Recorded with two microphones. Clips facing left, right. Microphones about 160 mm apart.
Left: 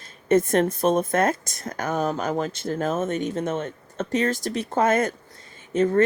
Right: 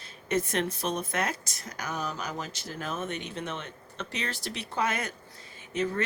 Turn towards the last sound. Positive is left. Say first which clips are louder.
# left 9 dB
turn(degrees=45)  # may be behind; listen again after turning